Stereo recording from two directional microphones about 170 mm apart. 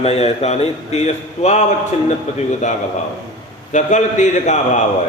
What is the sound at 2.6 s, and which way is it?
A man's voice, 45° left (ahead or behind).